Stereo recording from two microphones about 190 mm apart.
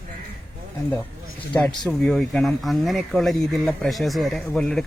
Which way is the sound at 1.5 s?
10° left (ahead or behind).